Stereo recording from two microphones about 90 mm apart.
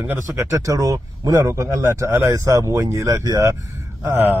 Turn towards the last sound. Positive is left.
turn(degrees=-30)  # may be behind; listen again after turning